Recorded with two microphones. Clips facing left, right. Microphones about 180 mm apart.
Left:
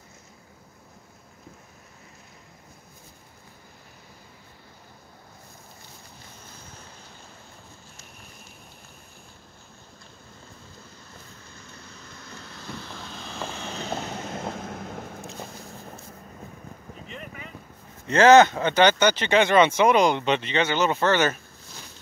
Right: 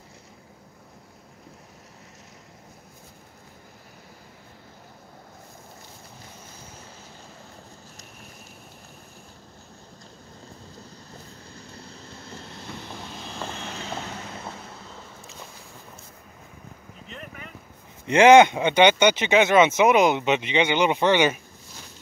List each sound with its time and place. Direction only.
11.1 s vehicle: 35° right (ahead or behind); by 13.2 s 15° right (ahead or behind)
14.2 s vehicle: 50° left (ahead or behind)
14.7 s vehicle: 75° left (ahead or behind); by 15.2 s 60° left (ahead or behind)
17.1 s boat: centre (ahead or behind)
18.0 s speech: 15° right (ahead or behind)